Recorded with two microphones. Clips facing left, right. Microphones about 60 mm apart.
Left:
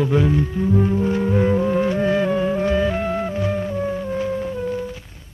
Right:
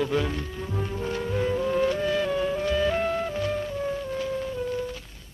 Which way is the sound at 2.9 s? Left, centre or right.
Centre.